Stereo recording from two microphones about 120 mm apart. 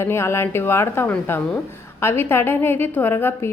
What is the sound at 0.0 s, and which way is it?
A woman's voice, 20° left (ahead or behind).